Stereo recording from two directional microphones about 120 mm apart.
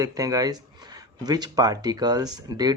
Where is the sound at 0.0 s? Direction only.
30° right (ahead or behind).